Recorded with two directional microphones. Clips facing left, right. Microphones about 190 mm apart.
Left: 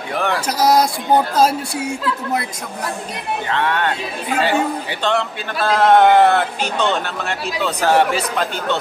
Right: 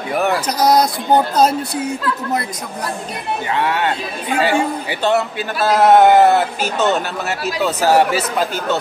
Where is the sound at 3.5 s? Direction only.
10° right (ahead or behind).